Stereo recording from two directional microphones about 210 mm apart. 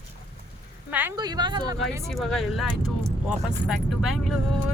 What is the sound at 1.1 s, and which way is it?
Speech, 20° right (ahead or behind).